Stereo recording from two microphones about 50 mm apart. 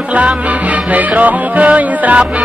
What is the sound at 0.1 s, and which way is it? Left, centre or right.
Music, right.